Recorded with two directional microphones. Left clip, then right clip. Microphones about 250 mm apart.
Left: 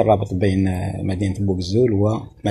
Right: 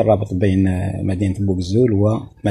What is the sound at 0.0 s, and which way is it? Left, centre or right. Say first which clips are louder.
Speech: right 1 dB; right.